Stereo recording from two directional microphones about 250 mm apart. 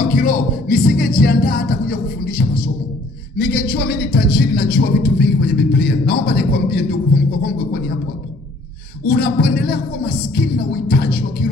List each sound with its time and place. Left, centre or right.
0.1 s music: left
3.3 s speech: left
9.0 s speech: left